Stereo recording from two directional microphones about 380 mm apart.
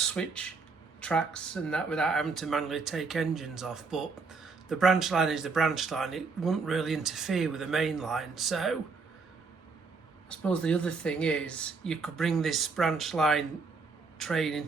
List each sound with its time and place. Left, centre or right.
0.0 s speech: centre
10.2 s speech: centre